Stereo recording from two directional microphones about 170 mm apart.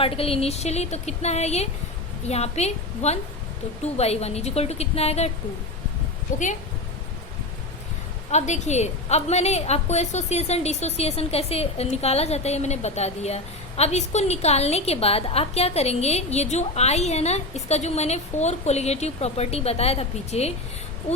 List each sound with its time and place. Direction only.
0.0 s a woman's voice: 35° left (ahead or behind)
8.3 s a woman's voice: 45° left (ahead or behind)